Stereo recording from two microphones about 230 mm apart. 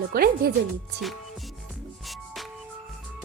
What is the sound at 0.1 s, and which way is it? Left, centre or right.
Speech, right.